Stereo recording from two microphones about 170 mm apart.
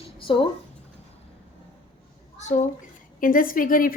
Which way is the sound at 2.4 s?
45° left (ahead or behind).